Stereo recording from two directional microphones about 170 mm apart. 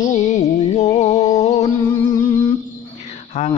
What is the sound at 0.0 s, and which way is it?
Music, 45° left (ahead or behind).